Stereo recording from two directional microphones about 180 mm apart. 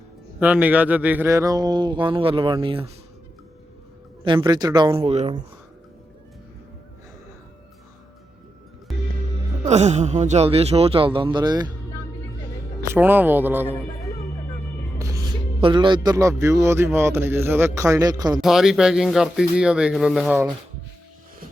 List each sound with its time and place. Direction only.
0.3 s speech: 10° right (ahead or behind); by 2.9 s 30° right (ahead or behind)
4.2 s speech: 25° right (ahead or behind)
9.6 s speech: 40° right (ahead or behind); by 11.7 s 25° right (ahead or behind)
12.9 s a man's voice: 10° right (ahead or behind)
14.9 s music: 15° right (ahead or behind)
15.6 s a man's voice: 25° right (ahead or behind)
18.4 s speech: centre (ahead or behind)